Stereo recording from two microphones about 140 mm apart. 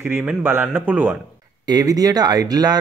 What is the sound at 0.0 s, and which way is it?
A man's voice, 15° right (ahead or behind).